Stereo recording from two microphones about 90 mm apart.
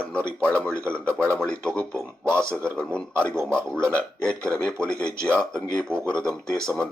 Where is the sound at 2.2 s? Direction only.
30° right (ahead or behind).